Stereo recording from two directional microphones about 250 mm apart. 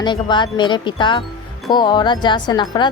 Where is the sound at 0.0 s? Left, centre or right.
Centre.